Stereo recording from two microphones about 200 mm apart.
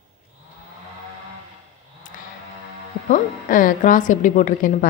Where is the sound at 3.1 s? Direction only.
40° left (ahead or behind).